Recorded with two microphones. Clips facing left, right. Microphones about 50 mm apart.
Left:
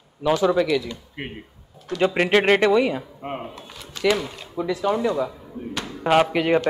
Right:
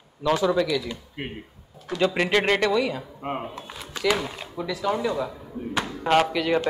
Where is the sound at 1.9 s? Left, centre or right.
Left.